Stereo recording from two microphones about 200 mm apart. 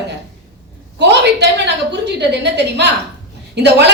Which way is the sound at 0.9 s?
55° right (ahead or behind).